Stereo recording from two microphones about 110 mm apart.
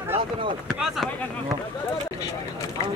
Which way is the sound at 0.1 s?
55° right (ahead or behind).